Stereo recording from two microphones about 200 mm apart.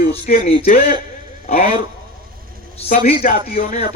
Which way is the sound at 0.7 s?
25° right (ahead or behind).